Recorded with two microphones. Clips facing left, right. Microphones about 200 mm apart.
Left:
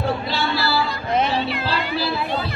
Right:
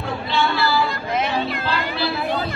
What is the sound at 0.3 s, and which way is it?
Music, 40° left (ahead or behind).